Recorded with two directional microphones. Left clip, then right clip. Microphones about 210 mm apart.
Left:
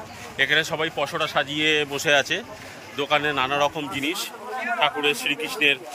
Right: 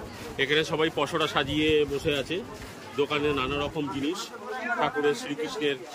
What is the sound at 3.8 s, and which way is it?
Speech, 35° left (ahead or behind).